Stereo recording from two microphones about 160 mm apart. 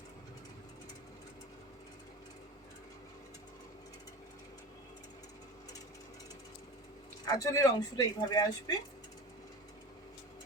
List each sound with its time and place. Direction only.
7.3 s speech: 20° left (ahead or behind)